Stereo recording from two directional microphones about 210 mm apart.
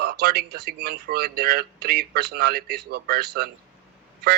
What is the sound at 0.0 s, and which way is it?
A man's voice, 50° right (ahead or behind).